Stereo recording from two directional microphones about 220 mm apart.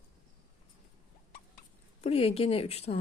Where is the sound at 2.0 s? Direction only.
25° left (ahead or behind).